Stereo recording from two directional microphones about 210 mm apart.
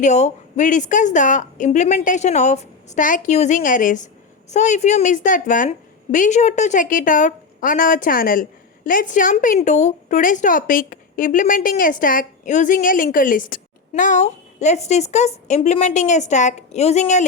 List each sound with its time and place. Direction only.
0.0 s a woman's voice: 35° left (ahead or behind)